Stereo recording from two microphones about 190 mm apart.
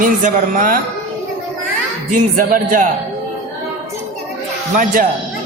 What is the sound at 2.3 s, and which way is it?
Speech, 45° right (ahead or behind).